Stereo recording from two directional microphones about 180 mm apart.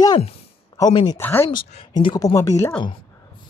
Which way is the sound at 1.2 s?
10° left (ahead or behind).